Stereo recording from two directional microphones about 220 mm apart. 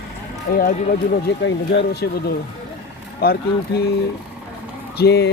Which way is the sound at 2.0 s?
50° left (ahead or behind).